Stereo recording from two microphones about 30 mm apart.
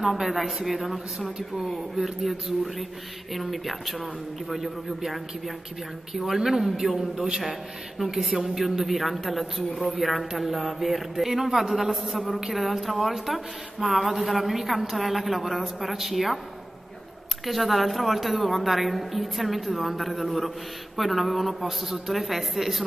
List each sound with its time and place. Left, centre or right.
0.0 s a woman's voice: centre
8.0 s speech: right
8.5 s a woman's voice: centre
17.5 s a woman's voice: centre